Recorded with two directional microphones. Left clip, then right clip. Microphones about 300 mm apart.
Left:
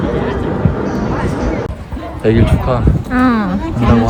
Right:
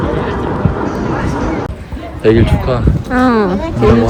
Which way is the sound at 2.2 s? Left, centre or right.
Left.